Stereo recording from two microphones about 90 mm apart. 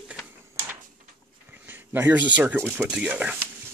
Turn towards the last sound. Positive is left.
turn(degrees=-15)  # may be behind; listen again after turning